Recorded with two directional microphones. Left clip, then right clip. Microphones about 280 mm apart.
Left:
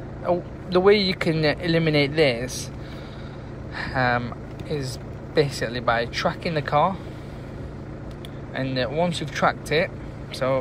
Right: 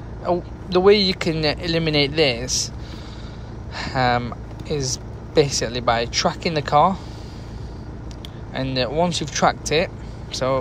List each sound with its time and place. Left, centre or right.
0.2 s speech: centre
3.7 s speech: centre
8.5 s speech: centre